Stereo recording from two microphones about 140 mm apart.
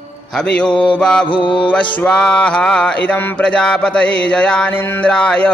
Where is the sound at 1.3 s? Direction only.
35° left (ahead or behind).